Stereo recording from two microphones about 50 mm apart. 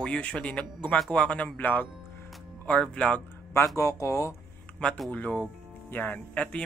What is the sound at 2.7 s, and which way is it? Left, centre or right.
Speech, centre.